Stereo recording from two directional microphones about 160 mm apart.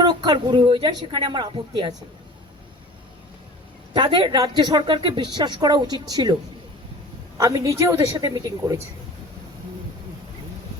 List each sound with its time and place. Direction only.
0.0 s a woman's voice: 25° right (ahead or behind)
3.9 s a woman's voice: 30° right (ahead or behind)
7.3 s a woman's voice: 20° right (ahead or behind)